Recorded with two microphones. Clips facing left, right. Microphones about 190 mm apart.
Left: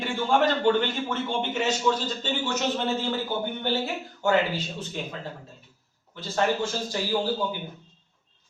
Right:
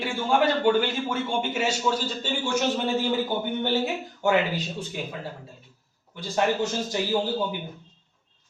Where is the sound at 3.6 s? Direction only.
15° right (ahead or behind).